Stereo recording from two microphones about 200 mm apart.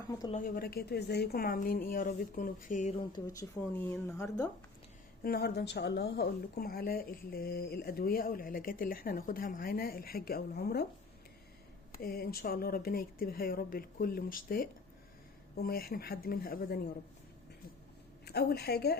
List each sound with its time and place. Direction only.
0.3 s a woman's voice: 45° left (ahead or behind)
3.8 s speech: 5° left (ahead or behind)
5.2 s a woman's voice: 50° left (ahead or behind)
11.9 s a woman's voice: 50° left (ahead or behind)
18.3 s a woman's voice: 55° left (ahead or behind)